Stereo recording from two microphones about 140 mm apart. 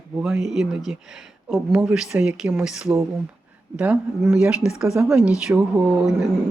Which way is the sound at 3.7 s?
10° right (ahead or behind).